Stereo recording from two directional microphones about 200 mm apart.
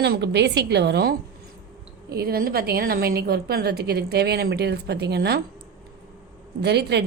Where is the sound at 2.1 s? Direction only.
50° right (ahead or behind).